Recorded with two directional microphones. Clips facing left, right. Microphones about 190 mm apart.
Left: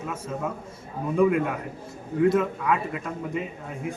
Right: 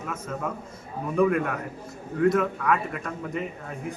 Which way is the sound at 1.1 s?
15° left (ahead or behind).